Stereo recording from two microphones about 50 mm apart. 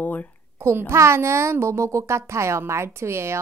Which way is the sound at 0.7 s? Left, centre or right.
Right.